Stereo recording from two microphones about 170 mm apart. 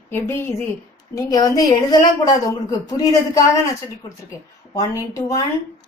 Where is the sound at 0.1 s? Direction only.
15° left (ahead or behind).